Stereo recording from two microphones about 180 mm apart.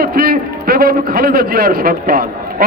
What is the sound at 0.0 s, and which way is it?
A man's voice, 60° right (ahead or behind).